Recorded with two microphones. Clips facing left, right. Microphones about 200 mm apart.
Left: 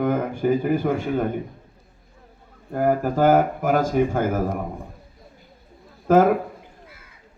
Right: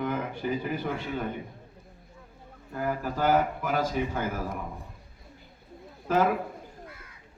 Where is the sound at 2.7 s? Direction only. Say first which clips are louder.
Left 10 dB; 50° left (ahead or behind).